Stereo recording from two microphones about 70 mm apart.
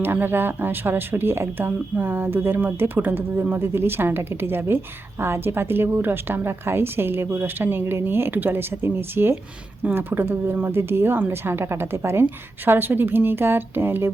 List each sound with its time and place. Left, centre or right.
0.0 s a woman's voice: right